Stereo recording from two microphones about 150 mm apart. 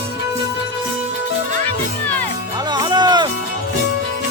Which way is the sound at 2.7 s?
30° right (ahead or behind).